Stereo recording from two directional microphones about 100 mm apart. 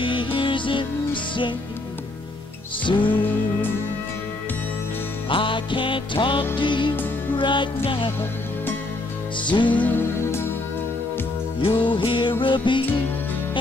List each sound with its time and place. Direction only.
0.0 s music: 55° left (ahead or behind)
2.8 s music: 55° left (ahead or behind)
5.3 s music: 55° left (ahead or behind)
9.4 s music: 50° left (ahead or behind)
9.8 s music: 20° left (ahead or behind)
11.6 s music: 55° left (ahead or behind)